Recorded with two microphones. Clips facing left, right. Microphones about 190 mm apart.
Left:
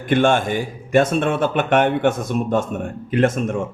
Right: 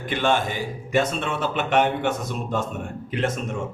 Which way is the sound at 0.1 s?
50° left (ahead or behind).